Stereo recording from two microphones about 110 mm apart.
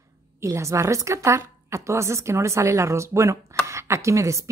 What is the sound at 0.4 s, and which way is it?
Speech, 25° right (ahead or behind).